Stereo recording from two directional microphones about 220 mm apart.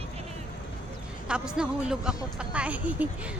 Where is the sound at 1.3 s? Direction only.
5° right (ahead or behind).